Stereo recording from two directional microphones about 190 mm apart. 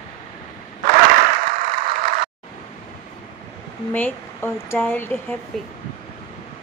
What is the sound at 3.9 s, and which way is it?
Speech, 10° left (ahead or behind).